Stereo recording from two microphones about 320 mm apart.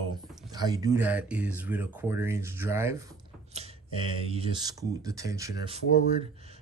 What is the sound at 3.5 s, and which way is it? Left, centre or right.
Speech, centre.